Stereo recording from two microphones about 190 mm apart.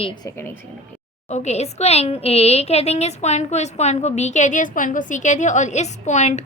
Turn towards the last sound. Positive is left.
turn(degrees=35)  # may be behind; listen again after turning